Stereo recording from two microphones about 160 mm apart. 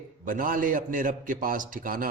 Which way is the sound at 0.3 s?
60° right (ahead or behind).